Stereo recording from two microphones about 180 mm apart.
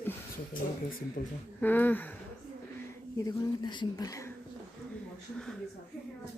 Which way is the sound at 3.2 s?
25° left (ahead or behind).